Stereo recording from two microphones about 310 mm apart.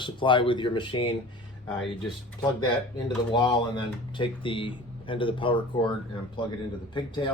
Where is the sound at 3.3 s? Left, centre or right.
Centre.